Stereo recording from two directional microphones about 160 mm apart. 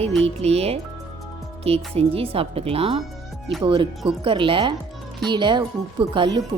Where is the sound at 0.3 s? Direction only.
40° right (ahead or behind).